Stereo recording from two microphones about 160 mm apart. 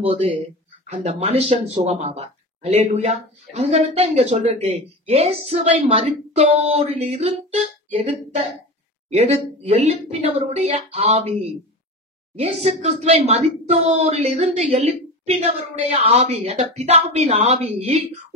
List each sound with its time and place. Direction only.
0.0 s speech: 40° right (ahead or behind)
12.4 s speech: 40° right (ahead or behind)